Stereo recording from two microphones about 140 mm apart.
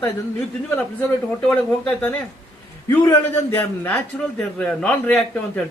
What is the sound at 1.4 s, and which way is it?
Speech, 10° left (ahead or behind).